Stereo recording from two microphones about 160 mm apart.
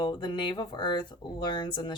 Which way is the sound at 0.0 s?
30° left (ahead or behind).